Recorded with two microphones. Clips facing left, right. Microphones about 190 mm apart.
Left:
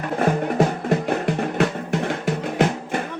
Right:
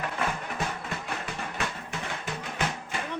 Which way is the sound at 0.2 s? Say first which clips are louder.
Left 16 dB; 50° left (ahead or behind).